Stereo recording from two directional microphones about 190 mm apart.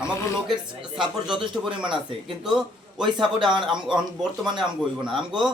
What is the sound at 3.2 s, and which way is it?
Speech, 25° right (ahead or behind).